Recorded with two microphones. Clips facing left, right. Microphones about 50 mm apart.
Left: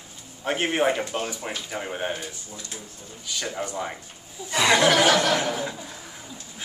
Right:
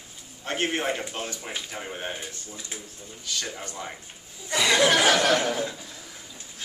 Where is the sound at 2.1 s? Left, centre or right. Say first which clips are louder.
Left 2 dB; right.